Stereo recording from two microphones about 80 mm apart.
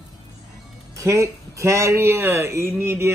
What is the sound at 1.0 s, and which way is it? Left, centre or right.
Speech, right.